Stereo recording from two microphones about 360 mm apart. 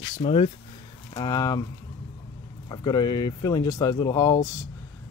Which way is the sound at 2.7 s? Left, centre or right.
Centre.